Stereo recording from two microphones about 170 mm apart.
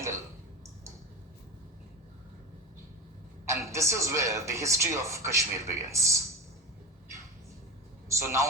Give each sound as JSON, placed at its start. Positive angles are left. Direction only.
{"t": 3.5, "sound": "speech", "side_deg": -15}
{"t": 8.1, "sound": "speech", "side_deg": -15}